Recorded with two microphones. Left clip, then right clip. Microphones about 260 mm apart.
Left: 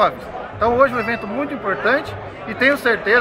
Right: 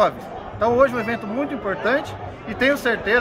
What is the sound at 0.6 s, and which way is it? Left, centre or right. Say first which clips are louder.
Speech: left 2 dB; centre.